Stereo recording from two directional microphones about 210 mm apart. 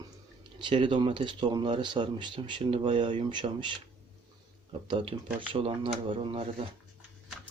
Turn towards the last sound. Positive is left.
turn(degrees=-25)  # may be behind; listen again after turning